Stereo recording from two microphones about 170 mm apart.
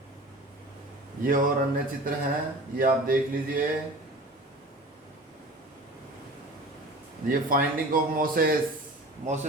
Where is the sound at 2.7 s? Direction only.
55° right (ahead or behind).